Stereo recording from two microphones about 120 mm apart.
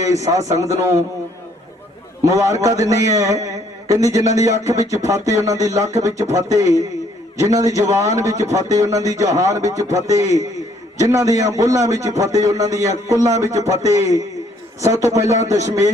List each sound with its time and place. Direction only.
0.0 s a man's voice: 25° right (ahead or behind)
2.2 s a man's voice: 25° right (ahead or behind)